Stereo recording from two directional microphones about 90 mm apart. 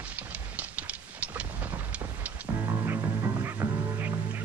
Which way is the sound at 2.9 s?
35° right (ahead or behind).